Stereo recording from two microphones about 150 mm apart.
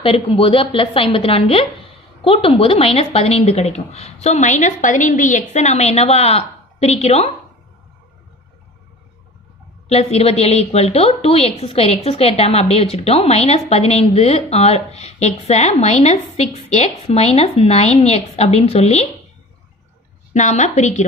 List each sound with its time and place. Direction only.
0.0 s a woman's voice: 35° left (ahead or behind)
9.8 s a woman's voice: 45° left (ahead or behind)
20.3 s a woman's voice: 50° left (ahead or behind)